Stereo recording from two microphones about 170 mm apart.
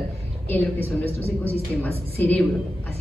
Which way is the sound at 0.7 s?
35° right (ahead or behind).